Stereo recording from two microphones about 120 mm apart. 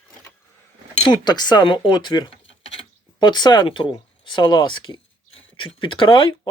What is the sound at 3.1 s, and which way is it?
Speech, 40° left (ahead or behind).